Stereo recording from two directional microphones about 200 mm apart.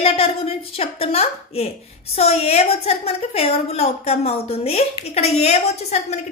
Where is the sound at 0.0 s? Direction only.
30° left (ahead or behind).